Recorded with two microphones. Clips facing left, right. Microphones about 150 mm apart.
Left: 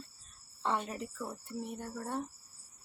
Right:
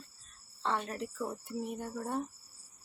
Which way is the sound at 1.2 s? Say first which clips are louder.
Right 3 dB; 15° right (ahead or behind).